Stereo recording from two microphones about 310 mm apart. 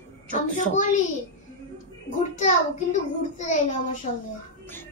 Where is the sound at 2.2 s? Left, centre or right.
Left.